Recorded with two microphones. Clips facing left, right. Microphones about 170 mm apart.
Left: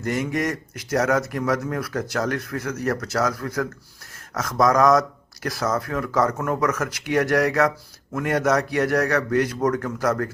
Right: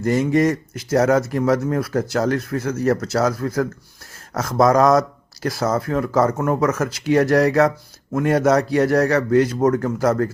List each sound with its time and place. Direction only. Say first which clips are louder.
0.0 s speech: right 7 dB; 30° right (ahead or behind)